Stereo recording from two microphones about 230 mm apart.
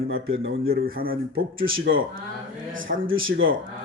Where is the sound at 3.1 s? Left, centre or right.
Right.